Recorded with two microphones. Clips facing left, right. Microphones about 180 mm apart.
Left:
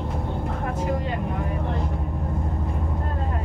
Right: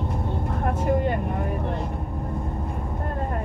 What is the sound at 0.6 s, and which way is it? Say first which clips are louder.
Vehicle: right 5 dB; 55° right (ahead or behind).